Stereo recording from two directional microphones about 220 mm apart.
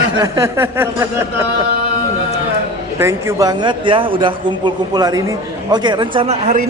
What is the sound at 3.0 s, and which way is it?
A man's voice, 10° right (ahead or behind).